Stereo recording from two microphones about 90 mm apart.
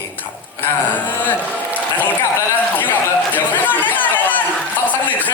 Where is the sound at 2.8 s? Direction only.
20° left (ahead or behind).